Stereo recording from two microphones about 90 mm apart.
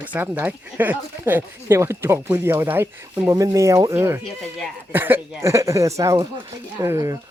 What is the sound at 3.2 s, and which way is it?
Speech, 40° right (ahead or behind).